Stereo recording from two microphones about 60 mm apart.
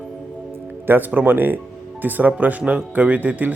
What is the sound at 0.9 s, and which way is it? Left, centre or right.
A man's voice, right.